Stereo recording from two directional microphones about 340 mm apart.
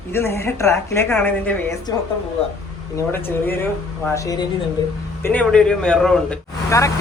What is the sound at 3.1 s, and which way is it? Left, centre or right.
Speech, centre.